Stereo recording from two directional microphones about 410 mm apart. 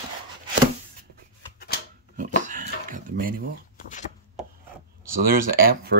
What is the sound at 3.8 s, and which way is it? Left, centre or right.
Chopping, centre.